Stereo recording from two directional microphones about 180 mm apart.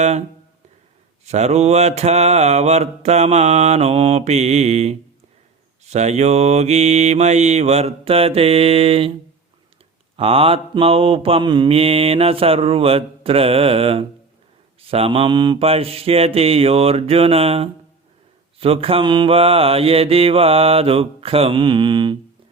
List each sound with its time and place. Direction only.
0.0 s mantra: 40° right (ahead or behind)
10.2 s mantra: 30° right (ahead or behind)